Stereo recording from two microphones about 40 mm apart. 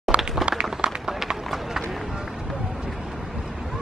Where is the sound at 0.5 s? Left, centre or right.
Right.